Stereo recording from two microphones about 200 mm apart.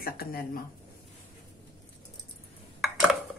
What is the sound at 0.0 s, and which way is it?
Speech, 50° left (ahead or behind).